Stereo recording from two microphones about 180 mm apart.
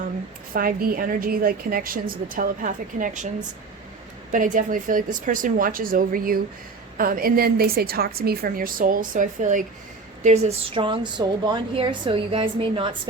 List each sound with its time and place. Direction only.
0.5 s a woman's voice: 55° right (ahead or behind)
4.3 s a woman's voice: 45° right (ahead or behind); by 12.9 s 30° right (ahead or behind)